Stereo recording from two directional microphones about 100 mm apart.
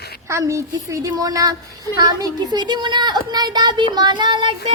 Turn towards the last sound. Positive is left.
turn(degrees=-55)  # may be behind; listen again after turning